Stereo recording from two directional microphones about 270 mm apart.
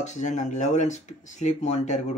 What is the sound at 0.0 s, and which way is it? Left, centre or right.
Speech, left.